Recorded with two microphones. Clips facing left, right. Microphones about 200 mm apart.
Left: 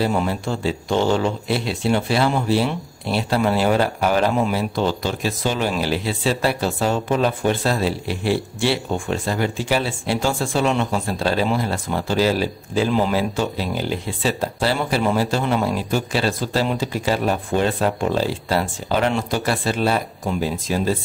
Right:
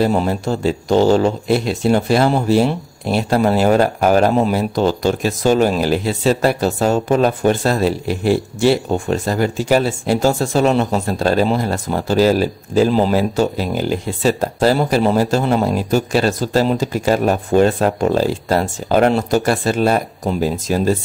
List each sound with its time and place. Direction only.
0.0 s speech: 40° right (ahead or behind)